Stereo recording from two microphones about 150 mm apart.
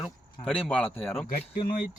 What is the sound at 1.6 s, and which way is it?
Speech, 30° left (ahead or behind).